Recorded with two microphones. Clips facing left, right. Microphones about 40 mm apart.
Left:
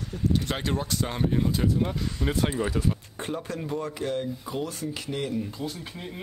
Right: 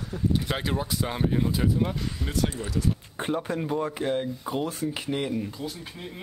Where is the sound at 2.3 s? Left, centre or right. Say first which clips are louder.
Left 2 dB; left.